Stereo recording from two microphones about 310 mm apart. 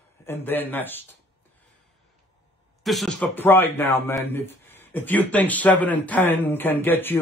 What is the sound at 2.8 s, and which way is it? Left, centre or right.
A man's voice, centre.